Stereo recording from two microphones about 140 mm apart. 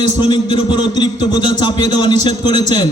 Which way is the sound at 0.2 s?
30° left (ahead or behind).